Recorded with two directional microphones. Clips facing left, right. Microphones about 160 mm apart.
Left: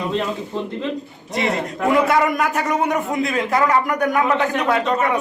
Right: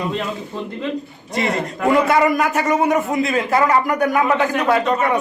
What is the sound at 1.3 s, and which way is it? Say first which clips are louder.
A man's voice: right 1 dB; centre (ahead or behind).